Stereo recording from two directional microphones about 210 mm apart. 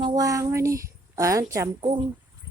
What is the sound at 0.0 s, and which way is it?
A woman's voice, 20° right (ahead or behind).